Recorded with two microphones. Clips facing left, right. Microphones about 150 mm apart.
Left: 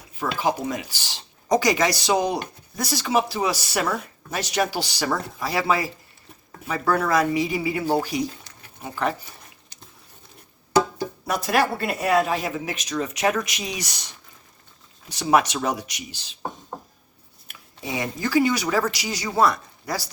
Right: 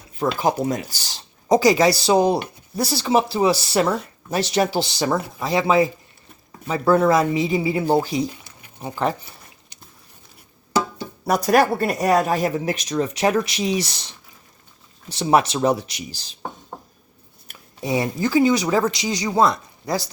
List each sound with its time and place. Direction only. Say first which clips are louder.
0.2 s speech: right 4 dB; 40° right (ahead or behind)
11.3 s speech: right 6 dB; 40° right (ahead or behind)
15.1 s speech: right 2 dB; 30° right (ahead or behind)
17.5 s speech: right 8 dB; 35° right (ahead or behind)